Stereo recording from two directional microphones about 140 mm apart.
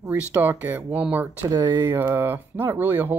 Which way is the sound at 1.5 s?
30° right (ahead or behind).